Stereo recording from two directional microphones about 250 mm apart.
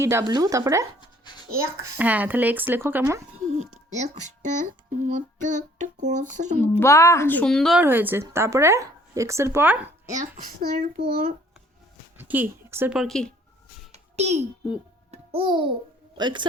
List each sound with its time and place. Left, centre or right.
0.0 s a woman's voice: centre
3.5 s speech: right
4.6 s a sound: right
6.7 s a woman's voice: centre
10.3 s speech: right
12.1 s a woman's voice: centre
13.9 s music: right
16.1 s a woman's voice: centre